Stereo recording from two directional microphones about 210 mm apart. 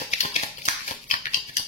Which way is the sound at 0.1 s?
35° left (ahead or behind).